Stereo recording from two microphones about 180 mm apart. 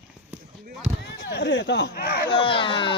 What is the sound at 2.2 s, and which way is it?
Speech, 30° left (ahead or behind).